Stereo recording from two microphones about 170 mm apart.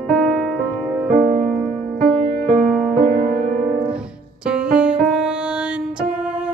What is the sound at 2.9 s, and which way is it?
Music, 50° right (ahead or behind).